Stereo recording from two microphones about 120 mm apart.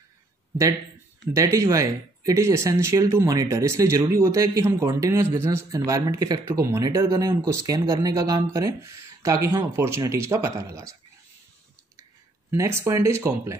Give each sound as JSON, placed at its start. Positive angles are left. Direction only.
{"t": 1.3, "sound": "speech", "side_deg": -25}
{"t": 12.0, "sound": "speech", "side_deg": -25}